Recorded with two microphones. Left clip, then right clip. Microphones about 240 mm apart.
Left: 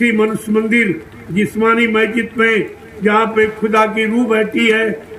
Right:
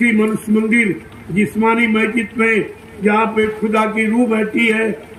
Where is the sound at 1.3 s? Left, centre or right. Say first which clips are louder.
Left 2 dB; left.